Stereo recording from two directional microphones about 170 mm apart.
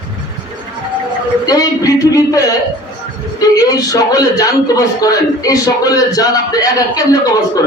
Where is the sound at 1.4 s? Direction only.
20° left (ahead or behind).